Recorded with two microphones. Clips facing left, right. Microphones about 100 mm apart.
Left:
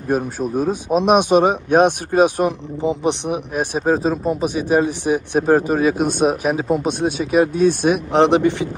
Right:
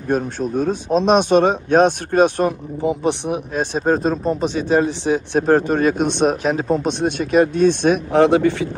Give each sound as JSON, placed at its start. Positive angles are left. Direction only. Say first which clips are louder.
{"t": 0.1, "sound": "speech", "louder": "even", "side_deg": 5}
{"t": 2.8, "sound": "speech", "louder": "even", "side_deg": 20}
{"t": 8.1, "sound": "speech", "louder": "even", "side_deg": 20}